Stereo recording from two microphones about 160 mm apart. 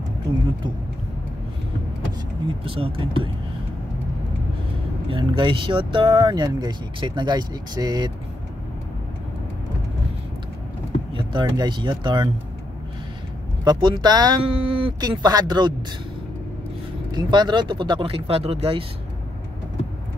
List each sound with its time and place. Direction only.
2.4 s speech: 35° right (ahead or behind)
5.1 s speech: 30° right (ahead or behind)
11.1 s speech: 30° right (ahead or behind)
13.7 s speech: 30° right (ahead or behind)
17.1 s speech: 25° right (ahead or behind)